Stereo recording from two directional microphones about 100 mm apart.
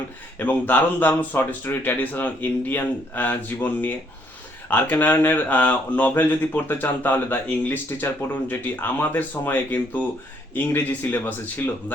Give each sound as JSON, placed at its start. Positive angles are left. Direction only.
{"t": 0.3, "sound": "speech", "side_deg": 15}